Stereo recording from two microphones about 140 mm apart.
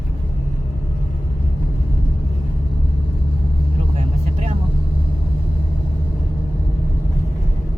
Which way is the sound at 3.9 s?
50° right (ahead or behind).